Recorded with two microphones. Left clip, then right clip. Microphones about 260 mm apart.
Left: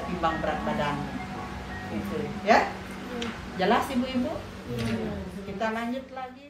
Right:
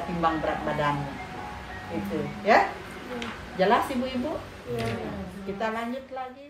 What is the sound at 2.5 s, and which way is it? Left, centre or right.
A woman's voice, right.